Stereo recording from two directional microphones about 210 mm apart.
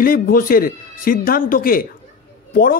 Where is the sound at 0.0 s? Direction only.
40° left (ahead or behind).